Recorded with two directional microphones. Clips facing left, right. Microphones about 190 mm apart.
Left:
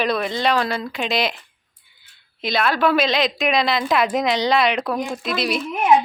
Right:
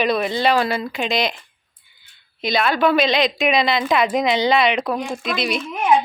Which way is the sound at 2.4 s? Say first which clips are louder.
Right 1 dB; centre (ahead or behind).